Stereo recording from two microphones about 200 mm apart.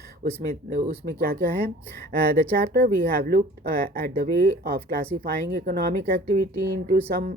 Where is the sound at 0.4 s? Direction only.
45° right (ahead or behind).